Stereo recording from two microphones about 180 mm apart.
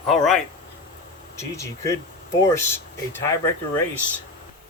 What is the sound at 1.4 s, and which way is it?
Speech, 15° left (ahead or behind).